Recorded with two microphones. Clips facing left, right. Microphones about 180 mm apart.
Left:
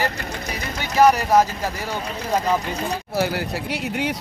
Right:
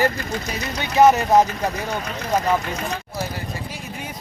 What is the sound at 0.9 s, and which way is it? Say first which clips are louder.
Speech: right 1 dB; 20° right (ahead or behind).